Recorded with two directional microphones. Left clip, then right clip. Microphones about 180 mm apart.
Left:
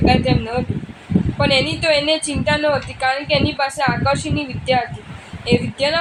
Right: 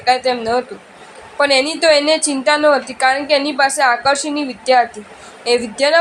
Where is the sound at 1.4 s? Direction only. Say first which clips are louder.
Right 4 dB; 30° right (ahead or behind).